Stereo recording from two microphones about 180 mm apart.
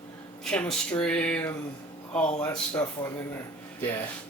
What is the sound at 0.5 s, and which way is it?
Speech, 5° left (ahead or behind).